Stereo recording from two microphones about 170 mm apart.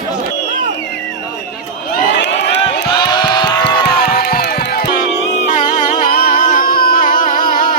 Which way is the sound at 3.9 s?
65° left (ahead or behind).